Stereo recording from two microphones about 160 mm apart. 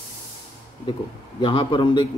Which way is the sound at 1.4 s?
30° left (ahead or behind).